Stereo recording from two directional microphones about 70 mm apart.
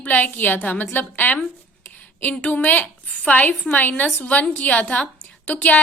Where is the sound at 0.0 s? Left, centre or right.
Left.